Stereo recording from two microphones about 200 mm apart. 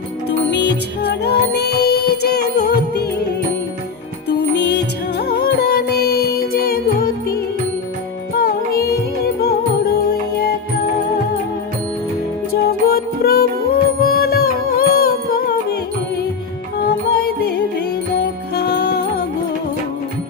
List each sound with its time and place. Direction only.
0.3 s music: 60° left (ahead or behind)
4.3 s music: 55° left (ahead or behind)
12.5 s music: 50° left (ahead or behind)
16.8 s music: 50° left (ahead or behind)